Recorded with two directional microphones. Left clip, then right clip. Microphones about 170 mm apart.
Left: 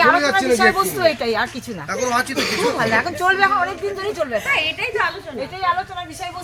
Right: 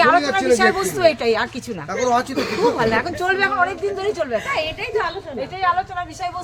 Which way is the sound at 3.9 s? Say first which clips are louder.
Right 1 dB; centre (ahead or behind).